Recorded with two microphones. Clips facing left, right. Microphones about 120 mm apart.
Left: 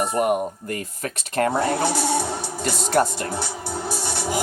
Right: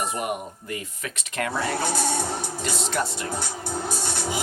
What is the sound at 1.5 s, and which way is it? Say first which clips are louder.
Speech: left 5 dB; 20° left (ahead or behind).